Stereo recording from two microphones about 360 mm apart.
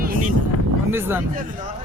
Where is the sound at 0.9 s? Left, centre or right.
Centre.